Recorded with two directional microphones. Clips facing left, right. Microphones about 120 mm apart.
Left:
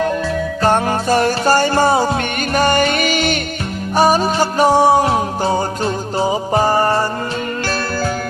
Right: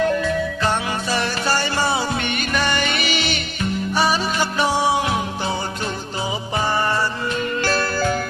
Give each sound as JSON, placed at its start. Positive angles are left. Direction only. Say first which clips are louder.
{"t": 0.6, "sound": "music", "louder": "left 7 dB", "side_deg": 45}